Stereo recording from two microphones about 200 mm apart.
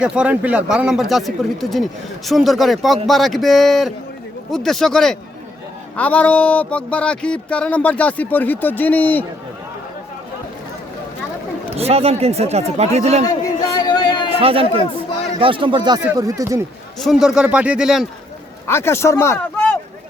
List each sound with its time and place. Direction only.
0.0 s speech: 5° right (ahead or behind)
11.8 s speech: 30° right (ahead or behind)
13.2 s a sound: 20° left (ahead or behind)
14.3 s speech: 30° right (ahead or behind)
17.0 s speech: centre (ahead or behind)
18.7 s speech: 10° left (ahead or behind)